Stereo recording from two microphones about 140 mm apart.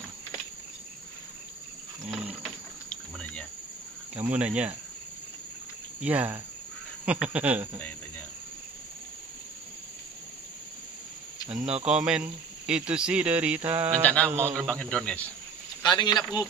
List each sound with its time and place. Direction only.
2.0 s cricket: 10° right (ahead or behind)
2.9 s cricket: 5° left (ahead or behind)
4.1 s speech: 10° right (ahead or behind)
6.0 s speech: 10° right (ahead or behind)
11.8 s speech: 5° right (ahead or behind)
13.7 s a sound: 20° right (ahead or behind)
14.0 s speech: 10° left (ahead or behind)
14.3 s speech: 15° right (ahead or behind)
14.7 s speech: 5° left (ahead or behind)
15.8 s speech: 30° left (ahead or behind)